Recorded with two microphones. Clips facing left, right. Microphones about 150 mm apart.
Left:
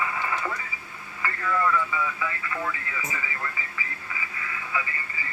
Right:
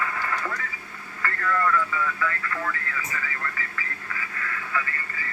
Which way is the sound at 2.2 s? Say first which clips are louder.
Right 2 dB; 10° left (ahead or behind).